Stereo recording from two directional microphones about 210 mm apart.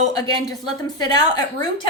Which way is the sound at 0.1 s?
20° left (ahead or behind).